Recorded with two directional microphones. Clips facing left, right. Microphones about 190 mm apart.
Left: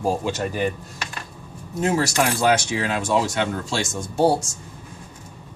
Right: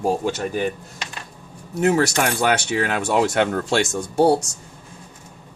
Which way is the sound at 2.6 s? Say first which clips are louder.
Right 2 dB; 65° right (ahead or behind).